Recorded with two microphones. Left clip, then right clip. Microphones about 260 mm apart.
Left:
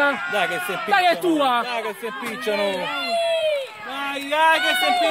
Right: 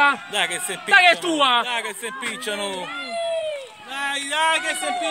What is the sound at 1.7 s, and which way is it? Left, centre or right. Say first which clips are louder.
A man's voice: even; left.